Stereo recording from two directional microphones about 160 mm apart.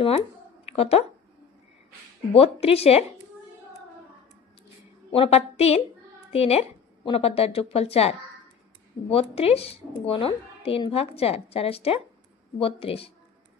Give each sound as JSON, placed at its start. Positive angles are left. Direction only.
{"t": 0.7, "sound": "speech", "side_deg": 40}
{"t": 2.3, "sound": "a woman's voice", "side_deg": 40}
{"t": 5.1, "sound": "a woman's voice", "side_deg": 35}